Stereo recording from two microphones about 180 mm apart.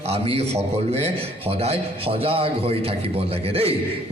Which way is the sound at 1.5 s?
35° right (ahead or behind).